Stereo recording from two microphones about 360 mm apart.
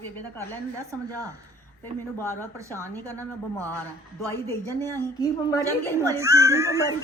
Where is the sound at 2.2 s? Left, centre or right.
Centre.